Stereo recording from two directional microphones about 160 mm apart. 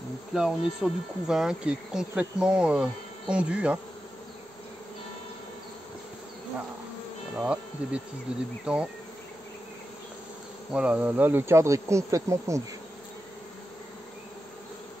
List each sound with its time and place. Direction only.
0.3 s speech: 5° right (ahead or behind)
7.3 s insect: 5° right (ahead or behind)
8.3 s speech: 5° right (ahead or behind)
10.7 s speech: 5° right (ahead or behind)